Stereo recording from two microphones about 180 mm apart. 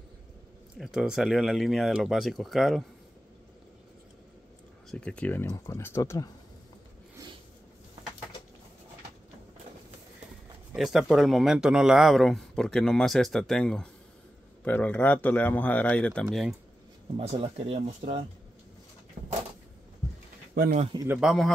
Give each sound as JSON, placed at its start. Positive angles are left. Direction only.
{"t": 0.7, "sound": "a man's voice", "side_deg": -5}
{"t": 4.9, "sound": "speech", "side_deg": 5}
{"t": 10.7, "sound": "a man's voice", "side_deg": 0}
{"t": 17.2, "sound": "speech", "side_deg": -35}
{"t": 21.1, "sound": "a man's voice", "side_deg": 0}